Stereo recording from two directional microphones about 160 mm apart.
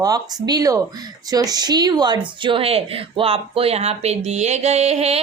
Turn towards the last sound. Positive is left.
turn(degrees=-40)  # may be behind; listen again after turning